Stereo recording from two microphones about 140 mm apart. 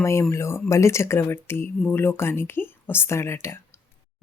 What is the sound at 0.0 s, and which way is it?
Speech, 20° left (ahead or behind).